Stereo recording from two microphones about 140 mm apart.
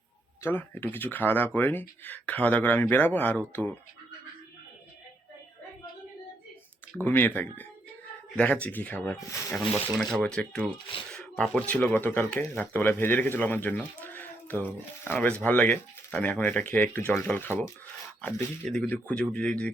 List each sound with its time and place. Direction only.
0.4 s speech: 15° left (ahead or behind)
7.0 s speech: 15° left (ahead or behind)
11.1 s a sound: 5° left (ahead or behind)
11.7 s speech: 10° left (ahead or behind)